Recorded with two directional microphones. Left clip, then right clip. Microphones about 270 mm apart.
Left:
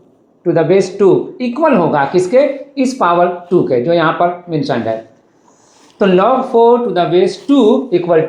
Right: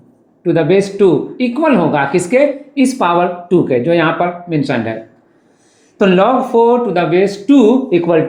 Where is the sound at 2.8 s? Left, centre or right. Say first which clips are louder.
Left 1 dB; right.